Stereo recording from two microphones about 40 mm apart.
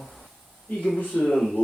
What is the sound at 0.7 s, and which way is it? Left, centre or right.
Speech, left.